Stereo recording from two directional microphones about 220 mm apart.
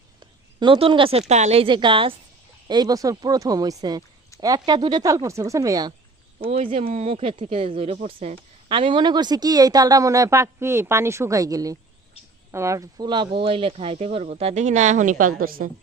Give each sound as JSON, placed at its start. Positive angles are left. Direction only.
{"t": 0.2, "sound": "a sound", "side_deg": -20}
{"t": 1.3, "sound": "speech", "side_deg": -30}
{"t": 6.4, "sound": "speech", "side_deg": -30}